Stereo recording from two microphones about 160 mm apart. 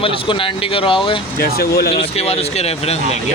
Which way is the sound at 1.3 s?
70° left (ahead or behind).